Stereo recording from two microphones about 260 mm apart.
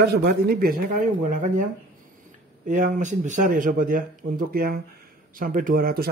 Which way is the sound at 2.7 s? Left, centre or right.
Right.